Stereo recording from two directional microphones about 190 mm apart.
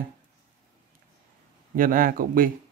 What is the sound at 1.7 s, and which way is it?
Speech, 50° right (ahead or behind).